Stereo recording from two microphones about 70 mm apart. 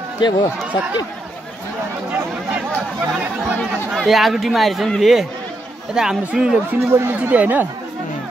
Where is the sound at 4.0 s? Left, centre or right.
Centre.